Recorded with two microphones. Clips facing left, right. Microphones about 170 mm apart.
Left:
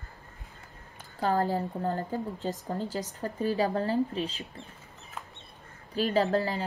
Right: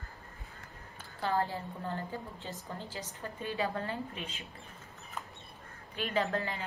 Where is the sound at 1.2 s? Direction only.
40° left (ahead or behind).